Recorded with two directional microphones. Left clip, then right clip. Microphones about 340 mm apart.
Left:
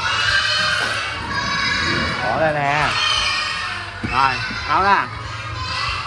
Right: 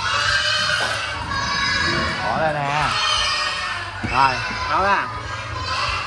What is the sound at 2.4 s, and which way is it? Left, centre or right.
Speech, centre.